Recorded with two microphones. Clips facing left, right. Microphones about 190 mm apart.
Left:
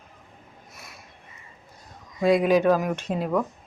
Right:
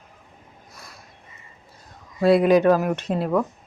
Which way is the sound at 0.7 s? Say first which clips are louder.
Right 1 dB; 20° left (ahead or behind).